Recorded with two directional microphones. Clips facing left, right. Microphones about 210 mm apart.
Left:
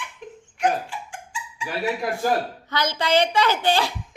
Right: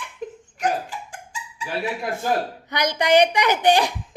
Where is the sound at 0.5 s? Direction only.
40° right (ahead or behind).